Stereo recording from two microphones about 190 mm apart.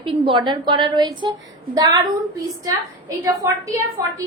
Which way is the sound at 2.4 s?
15° right (ahead or behind).